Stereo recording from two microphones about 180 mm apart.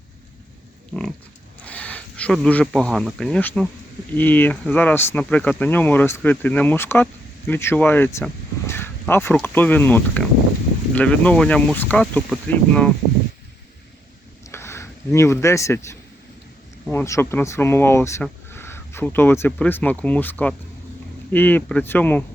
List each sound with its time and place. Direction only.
1.6 s speech: 10° left (ahead or behind)
14.5 s speech: 15° left (ahead or behind)